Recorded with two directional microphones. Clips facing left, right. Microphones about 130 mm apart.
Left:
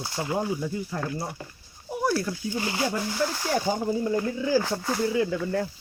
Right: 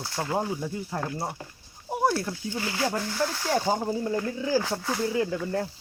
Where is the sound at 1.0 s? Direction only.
25° right (ahead or behind).